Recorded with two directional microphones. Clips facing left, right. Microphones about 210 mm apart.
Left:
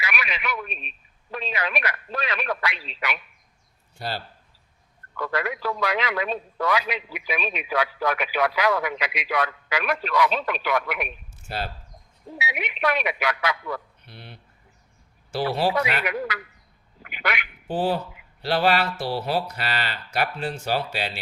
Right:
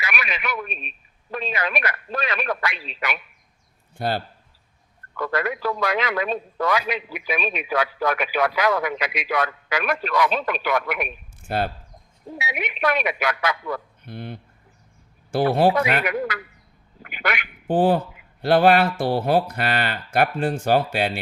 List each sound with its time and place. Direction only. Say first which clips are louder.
0.0 s a man's voice: right 1 dB; 45° right (ahead or behind)
17.0 s quack: right 2 dB; 45° right (ahead or behind)
18.4 s a man's voice: right 6 dB; 50° right (ahead or behind)